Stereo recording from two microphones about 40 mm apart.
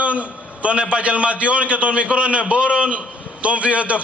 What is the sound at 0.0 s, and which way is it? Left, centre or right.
A man's voice, right.